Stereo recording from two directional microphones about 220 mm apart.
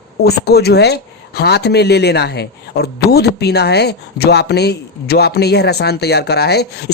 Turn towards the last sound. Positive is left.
turn(degrees=50)  # may be behind; listen again after turning